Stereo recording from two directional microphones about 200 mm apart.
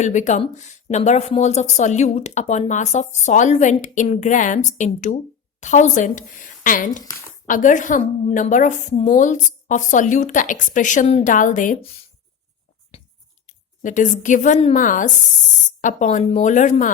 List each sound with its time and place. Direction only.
0.0 s speech: 35° left (ahead or behind)
7.0 s speech: 15° left (ahead or behind)
7.4 s speech: 40° left (ahead or behind)
13.5 s a woman's voice: 40° left (ahead or behind)